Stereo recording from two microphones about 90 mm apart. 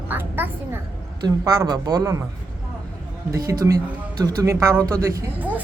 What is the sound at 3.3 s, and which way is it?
A child's voice, 40° right (ahead or behind).